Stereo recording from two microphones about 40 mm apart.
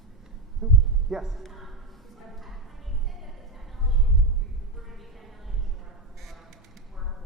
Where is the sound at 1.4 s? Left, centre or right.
Centre.